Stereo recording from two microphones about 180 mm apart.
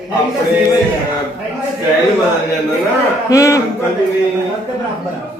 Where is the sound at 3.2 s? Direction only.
15° left (ahead or behind).